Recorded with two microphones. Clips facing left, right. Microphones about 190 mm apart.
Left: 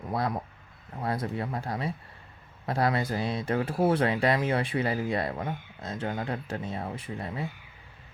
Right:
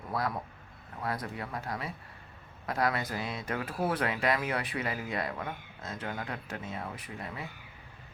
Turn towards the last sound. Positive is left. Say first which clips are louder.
# left 6 dB
turn(degrees=30)  # may be behind; listen again after turning